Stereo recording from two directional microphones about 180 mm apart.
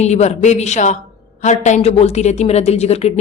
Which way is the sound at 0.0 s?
40° left (ahead or behind).